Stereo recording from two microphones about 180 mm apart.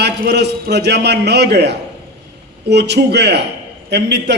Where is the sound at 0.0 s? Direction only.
65° right (ahead or behind).